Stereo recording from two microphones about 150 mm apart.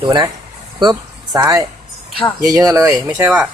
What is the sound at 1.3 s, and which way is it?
Speech, 25° right (ahead or behind).